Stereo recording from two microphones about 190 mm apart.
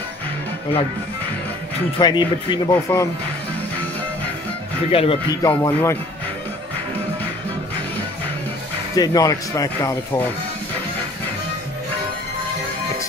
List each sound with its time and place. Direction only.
2.0 s speech: 25° left (ahead or behind)
4.9 s speech: 30° left (ahead or behind)
5.4 s speech: 15° left (ahead or behind)
8.9 s speech: 20° left (ahead or behind)